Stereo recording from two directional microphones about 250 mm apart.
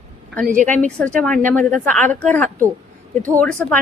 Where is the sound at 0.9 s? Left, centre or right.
Centre.